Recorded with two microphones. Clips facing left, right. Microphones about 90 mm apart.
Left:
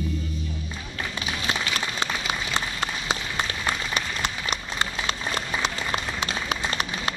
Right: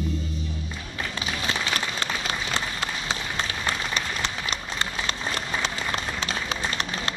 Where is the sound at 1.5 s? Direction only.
15° left (ahead or behind).